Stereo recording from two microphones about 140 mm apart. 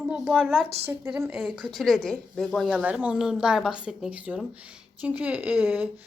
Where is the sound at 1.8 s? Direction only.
Centre (ahead or behind).